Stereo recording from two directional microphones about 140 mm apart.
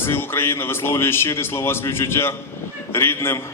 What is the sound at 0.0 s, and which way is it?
A man's voice, 15° left (ahead or behind).